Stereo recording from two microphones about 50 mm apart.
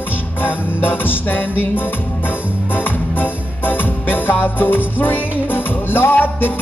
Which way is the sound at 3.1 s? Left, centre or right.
Left.